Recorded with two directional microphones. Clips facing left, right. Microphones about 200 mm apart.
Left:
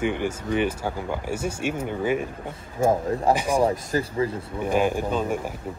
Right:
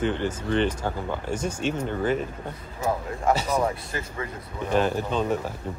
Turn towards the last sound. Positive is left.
turn(degrees=10)  # may be behind; listen again after turning